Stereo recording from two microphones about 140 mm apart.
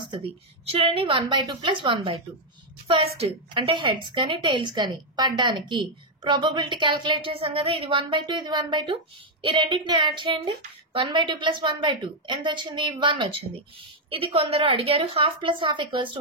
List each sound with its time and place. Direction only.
0.7 s a woman's voice: 45° right (ahead or behind)